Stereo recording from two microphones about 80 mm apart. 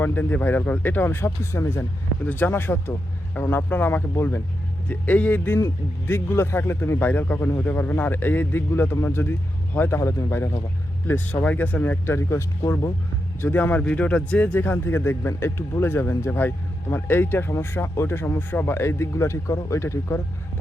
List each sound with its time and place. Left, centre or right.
0.0 s speech: left
4.9 s speech: centre
5.5 s speech: left
10.0 s a man's voice: left
11.0 s speech: left
13.4 s speech: left